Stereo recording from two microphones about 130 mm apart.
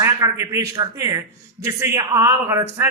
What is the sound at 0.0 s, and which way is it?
A man's voice, 25° right (ahead or behind).